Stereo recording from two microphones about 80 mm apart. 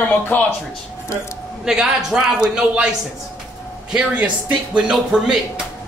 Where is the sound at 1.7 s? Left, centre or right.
Centre.